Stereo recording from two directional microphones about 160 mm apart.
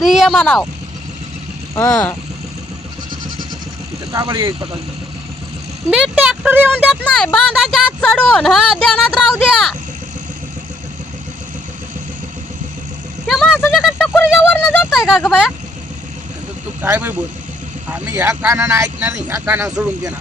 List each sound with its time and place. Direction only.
0.0 s speech: centre (ahead or behind)
1.9 s speech: 5° left (ahead or behind)
4.1 s speech: 25° right (ahead or behind)
5.9 s speech: 5° right (ahead or behind)
7.1 s speech: 5° left (ahead or behind)
13.2 s vehicle: centre (ahead or behind)
13.7 s speech: centre (ahead or behind)
14.2 s a sound: 15° left (ahead or behind)
14.8 s speech: centre (ahead or behind)
16.8 s speech: 15° right (ahead or behind)